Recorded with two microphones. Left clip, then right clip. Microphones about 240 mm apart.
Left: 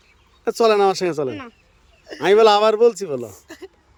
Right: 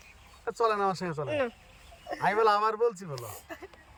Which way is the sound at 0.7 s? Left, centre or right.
Left.